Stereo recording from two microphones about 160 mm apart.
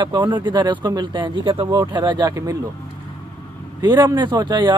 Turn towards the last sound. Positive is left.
turn(degrees=-25)  # may be behind; listen again after turning